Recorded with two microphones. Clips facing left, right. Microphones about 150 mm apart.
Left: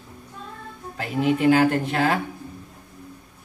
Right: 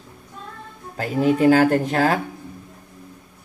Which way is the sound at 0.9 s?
40° right (ahead or behind).